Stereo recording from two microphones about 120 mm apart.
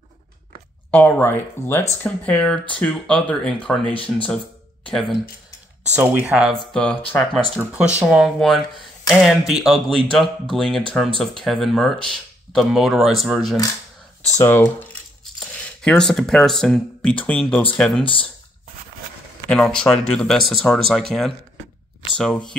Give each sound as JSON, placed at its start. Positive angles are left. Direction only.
{"t": 0.9, "sound": "speech", "side_deg": 15}
{"t": 5.9, "sound": "speech", "side_deg": -10}
{"t": 6.7, "sound": "speech", "side_deg": 10}
{"t": 8.0, "sound": "speech", "side_deg": -5}
{"t": 14.4, "sound": "speech", "side_deg": 20}
{"t": 15.3, "sound": "speech", "side_deg": 5}
{"t": 19.5, "sound": "speech", "side_deg": 5}